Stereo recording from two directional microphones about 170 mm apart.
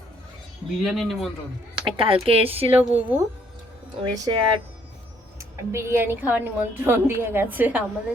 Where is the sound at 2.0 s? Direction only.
35° right (ahead or behind).